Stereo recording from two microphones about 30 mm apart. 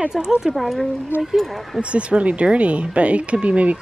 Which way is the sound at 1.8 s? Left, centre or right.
Right.